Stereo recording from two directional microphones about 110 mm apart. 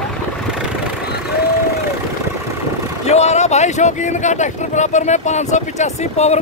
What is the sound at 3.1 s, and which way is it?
Speech, 85° left.